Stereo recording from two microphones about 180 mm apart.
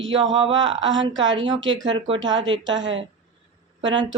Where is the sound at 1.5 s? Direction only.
90° right.